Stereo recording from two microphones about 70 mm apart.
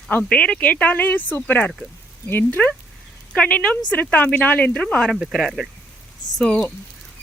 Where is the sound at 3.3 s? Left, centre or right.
Centre.